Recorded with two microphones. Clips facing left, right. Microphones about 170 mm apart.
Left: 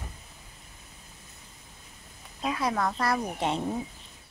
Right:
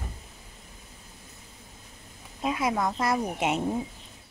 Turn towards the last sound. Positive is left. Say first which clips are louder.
# right 2 dB
turn(degrees=-15)  # may be behind; listen again after turning